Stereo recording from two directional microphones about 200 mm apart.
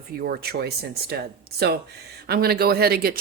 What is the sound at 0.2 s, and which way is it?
Speech, 50° right (ahead or behind).